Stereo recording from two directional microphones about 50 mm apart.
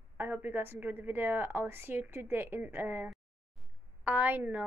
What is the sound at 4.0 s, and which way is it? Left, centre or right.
Speech, right.